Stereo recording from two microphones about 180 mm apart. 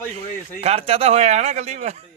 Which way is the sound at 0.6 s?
35° right (ahead or behind).